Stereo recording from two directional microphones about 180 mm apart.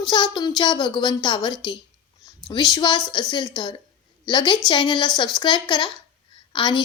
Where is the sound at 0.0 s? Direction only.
25° left (ahead or behind).